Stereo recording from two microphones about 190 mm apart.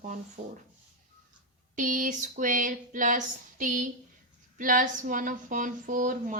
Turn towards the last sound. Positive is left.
turn(degrees=-40)  # may be behind; listen again after turning